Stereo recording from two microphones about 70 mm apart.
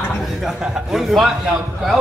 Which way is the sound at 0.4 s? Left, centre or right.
Centre.